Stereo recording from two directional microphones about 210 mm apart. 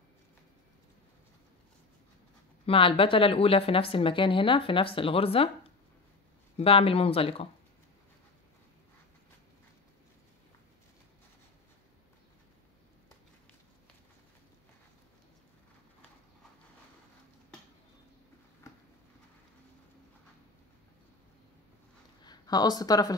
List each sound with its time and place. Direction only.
2.6 s speech: 25° left (ahead or behind)
6.5 s speech: 25° left (ahead or behind)
22.2 s speech: 20° left (ahead or behind)